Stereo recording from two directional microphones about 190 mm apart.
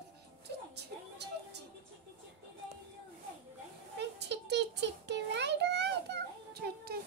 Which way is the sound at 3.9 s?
65° right (ahead or behind).